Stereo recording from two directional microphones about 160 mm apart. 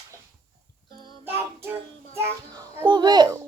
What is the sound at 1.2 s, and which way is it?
Child singing, 15° right (ahead or behind).